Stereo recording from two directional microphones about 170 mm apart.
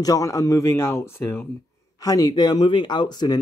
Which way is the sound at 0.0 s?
20° left (ahead or behind).